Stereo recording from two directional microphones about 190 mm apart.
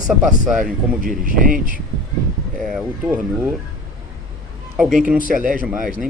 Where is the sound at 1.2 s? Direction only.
45° right (ahead or behind).